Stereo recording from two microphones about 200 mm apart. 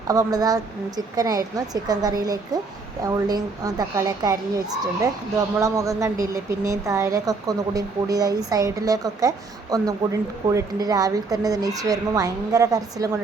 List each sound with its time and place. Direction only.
0.1 s a woman's voice: 20° right (ahead or behind)